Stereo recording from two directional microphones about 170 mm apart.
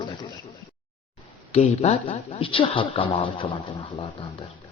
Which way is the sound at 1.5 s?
40° left (ahead or behind).